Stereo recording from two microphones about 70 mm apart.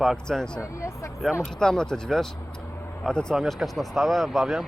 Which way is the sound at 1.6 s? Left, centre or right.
Centre.